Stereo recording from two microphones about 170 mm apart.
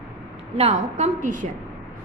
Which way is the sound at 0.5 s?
40° right (ahead or behind).